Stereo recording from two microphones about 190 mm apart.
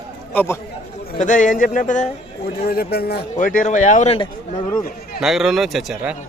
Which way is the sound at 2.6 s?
55° left (ahead or behind).